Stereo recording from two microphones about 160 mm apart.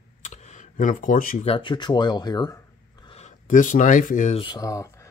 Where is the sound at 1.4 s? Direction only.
35° left (ahead or behind).